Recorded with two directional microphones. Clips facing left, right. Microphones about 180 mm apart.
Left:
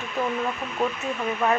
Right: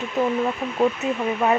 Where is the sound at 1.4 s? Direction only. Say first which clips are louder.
Right 3 dB; 25° right (ahead or behind).